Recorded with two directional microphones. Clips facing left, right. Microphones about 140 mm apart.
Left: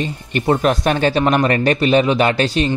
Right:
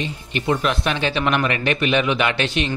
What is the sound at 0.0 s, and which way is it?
Speech, 45° left (ahead or behind).